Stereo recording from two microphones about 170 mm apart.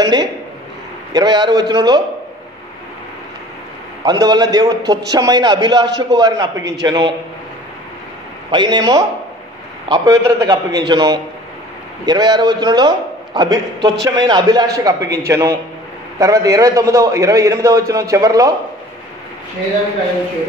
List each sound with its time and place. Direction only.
0.0 s a sound: 25° right (ahead or behind)
1.1 s a man's voice: 25° right (ahead or behind)
4.0 s a man's voice: 25° right (ahead or behind)
8.5 s a man's voice: 25° right (ahead or behind)